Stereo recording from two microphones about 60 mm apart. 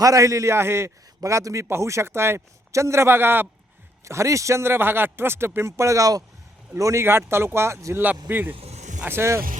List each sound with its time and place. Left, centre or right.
0.0 s a man's voice: right
1.2 s a man's voice: right
4.0 s speech: right
6.7 s a man's voice: right
7.0 s speech: right
8.0 s speech: right
9.0 s speech: right